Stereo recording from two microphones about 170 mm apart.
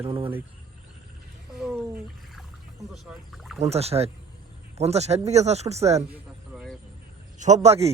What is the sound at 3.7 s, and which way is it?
Speech, 35° right (ahead or behind).